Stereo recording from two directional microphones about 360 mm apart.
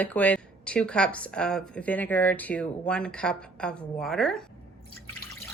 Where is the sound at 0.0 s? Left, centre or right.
Centre.